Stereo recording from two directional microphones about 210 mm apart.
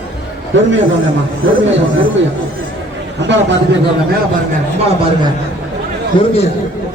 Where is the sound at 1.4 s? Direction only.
70° right (ahead or behind).